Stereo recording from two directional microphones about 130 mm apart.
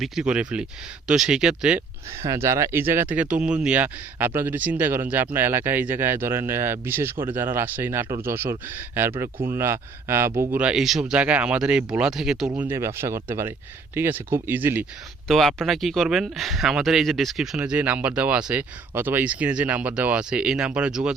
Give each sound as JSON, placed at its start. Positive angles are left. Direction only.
{"t": 0.0, "sound": "speech", "side_deg": -5}
{"t": 2.2, "sound": "speech", "side_deg": -20}
{"t": 12.5, "sound": "speech", "side_deg": -20}
{"t": 15.3, "sound": "speech", "side_deg": 0}